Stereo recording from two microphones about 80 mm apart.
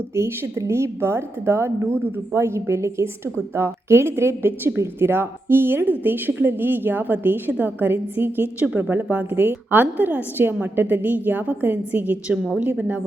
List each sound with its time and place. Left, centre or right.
0.2 s a woman's voice: right; by 13.0 s centre